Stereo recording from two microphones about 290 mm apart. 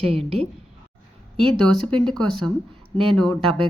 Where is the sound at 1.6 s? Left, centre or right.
Centre.